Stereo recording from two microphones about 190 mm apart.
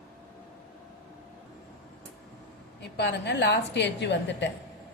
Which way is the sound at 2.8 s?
60° left (ahead or behind).